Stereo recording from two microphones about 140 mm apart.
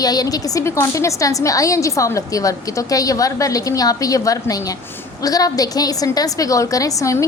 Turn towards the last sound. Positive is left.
turn(degrees=20)  # may be behind; listen again after turning